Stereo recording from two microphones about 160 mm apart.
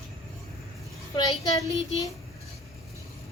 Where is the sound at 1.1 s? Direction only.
20° left (ahead or behind).